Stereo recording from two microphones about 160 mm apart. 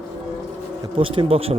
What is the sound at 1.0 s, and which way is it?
Speech, 35° right (ahead or behind).